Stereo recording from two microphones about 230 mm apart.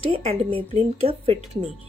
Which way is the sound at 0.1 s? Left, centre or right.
Right.